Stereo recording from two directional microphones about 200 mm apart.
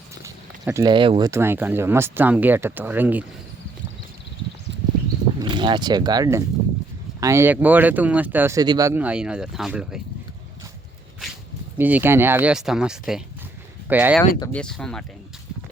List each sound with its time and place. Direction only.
0.6 s speech: 15° right (ahead or behind)
1.3 s speech: 10° right (ahead or behind)
5.4 s speech: 25° right (ahead or behind); by 10.0 s 5° right (ahead or behind)
11.8 s speech: 10° right (ahead or behind)
14.5 s speech: 5° left (ahead or behind)